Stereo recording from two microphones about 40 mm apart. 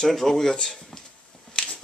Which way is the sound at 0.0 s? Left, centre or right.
Centre.